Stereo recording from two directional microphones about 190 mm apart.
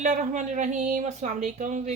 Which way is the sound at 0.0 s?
40° right (ahead or behind).